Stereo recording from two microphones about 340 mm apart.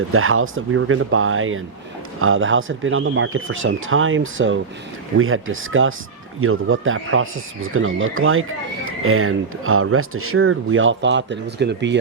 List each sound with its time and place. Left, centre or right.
0.1 s speech: right